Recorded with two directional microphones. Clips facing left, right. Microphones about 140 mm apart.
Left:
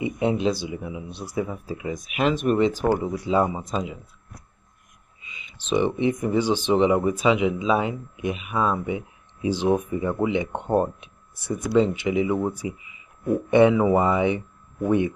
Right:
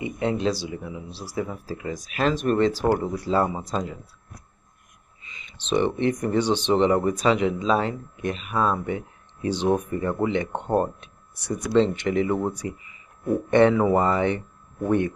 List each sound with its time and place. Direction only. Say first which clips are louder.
0.2 s speech: left 1 dB; 10° left (ahead or behind)
0.5 s speech: left 1 dB; 25° left (ahead or behind)
0.8 s speech: left 2 dB; 15° left (ahead or behind)
5.7 s speech: even; 10° left (ahead or behind)